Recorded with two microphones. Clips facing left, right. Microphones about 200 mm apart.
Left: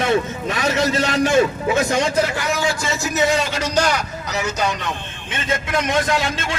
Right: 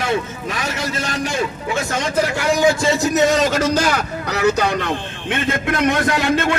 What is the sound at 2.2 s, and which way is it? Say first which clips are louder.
Speech: right 5 dB; 15° right (ahead or behind).